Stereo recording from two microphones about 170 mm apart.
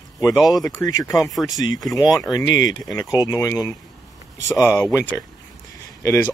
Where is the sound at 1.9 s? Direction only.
25° left (ahead or behind).